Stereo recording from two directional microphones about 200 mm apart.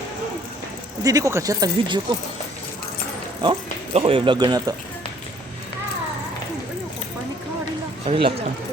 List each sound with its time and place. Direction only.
1.0 s speech: 15° right (ahead or behind)
3.4 s speech: 25° right (ahead or behind)
8.0 s speech: 30° right (ahead or behind)